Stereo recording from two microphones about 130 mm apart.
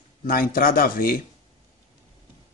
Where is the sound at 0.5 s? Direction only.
90° left.